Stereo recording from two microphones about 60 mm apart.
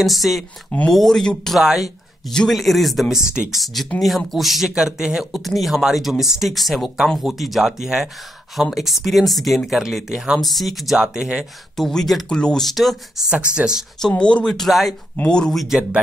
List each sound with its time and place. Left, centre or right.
0.0 s speech: centre
0.7 s speech: centre
0.9 s speech: centre
1.6 s speech: centre
2.2 s speech: centre
10.4 s speech: centre
11.0 s speech: centre
11.7 s speech: centre
12.6 s speech: centre
13.3 s speech: centre
14.0 s speech: centre
14.7 s speech: centre
15.2 s speech: centre
15.5 s speech: centre